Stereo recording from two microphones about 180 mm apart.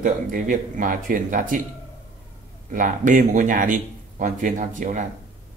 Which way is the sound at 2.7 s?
45° right (ahead or behind).